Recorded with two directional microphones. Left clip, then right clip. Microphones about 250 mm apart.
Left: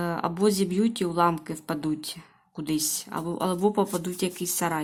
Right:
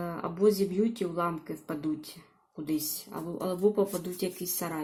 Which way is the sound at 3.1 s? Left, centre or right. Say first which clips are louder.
Left 4 dB; centre.